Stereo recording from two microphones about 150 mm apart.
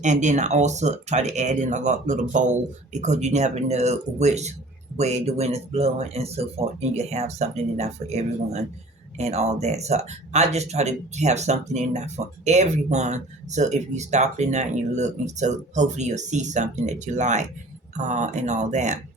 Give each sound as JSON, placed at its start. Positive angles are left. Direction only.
{"t": 0.0, "sound": "speech", "side_deg": -50}